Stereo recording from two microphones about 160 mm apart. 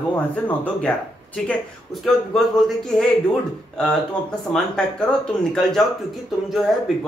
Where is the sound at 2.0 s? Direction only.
Centre (ahead or behind).